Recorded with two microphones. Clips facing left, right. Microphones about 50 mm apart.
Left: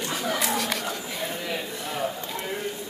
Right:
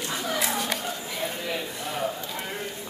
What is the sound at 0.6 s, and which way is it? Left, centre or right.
Chatter, left.